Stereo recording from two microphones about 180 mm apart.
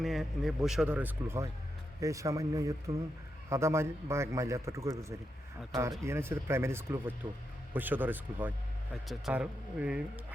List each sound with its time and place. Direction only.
0.0 s a man's voice: centre (ahead or behind)